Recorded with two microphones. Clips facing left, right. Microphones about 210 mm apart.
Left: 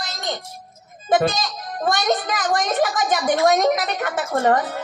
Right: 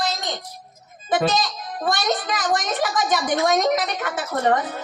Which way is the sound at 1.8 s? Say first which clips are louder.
Left 2 dB; 45° left (ahead or behind).